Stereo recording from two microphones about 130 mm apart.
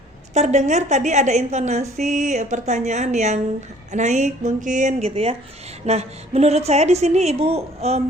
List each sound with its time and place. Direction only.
0.3 s a woman's voice: 60° right (ahead or behind)